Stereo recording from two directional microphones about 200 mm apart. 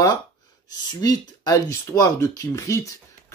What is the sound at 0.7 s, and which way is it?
Speech, 20° left (ahead or behind).